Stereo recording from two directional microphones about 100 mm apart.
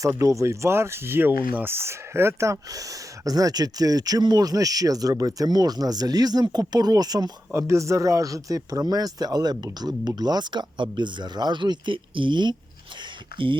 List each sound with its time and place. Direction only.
0.0 s speech: 30° right (ahead or behind)
7.5 s speech: 30° right (ahead or behind); by 13.6 s 55° right (ahead or behind)